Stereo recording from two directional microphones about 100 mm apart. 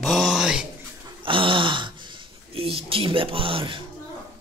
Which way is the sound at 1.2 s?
60° right (ahead or behind).